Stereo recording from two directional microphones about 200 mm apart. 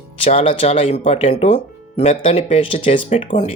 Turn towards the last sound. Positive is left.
turn(degrees=30)  # may be behind; listen again after turning